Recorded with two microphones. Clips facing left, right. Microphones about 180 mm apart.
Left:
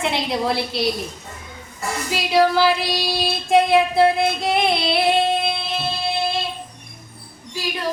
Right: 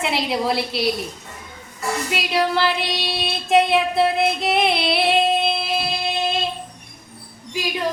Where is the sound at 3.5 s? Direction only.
Centre (ahead or behind).